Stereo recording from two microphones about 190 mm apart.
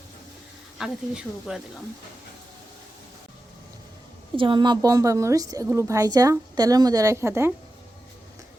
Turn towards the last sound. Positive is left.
turn(degrees=-15)  # may be behind; listen again after turning